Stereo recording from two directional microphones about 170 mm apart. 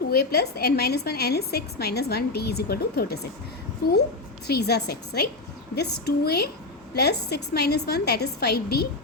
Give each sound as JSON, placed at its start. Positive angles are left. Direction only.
{"t": 0.1, "sound": "a woman's voice", "side_deg": 70}
{"t": 4.4, "sound": "a woman's voice", "side_deg": 70}